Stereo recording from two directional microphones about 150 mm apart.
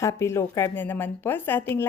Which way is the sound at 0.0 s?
20° left (ahead or behind).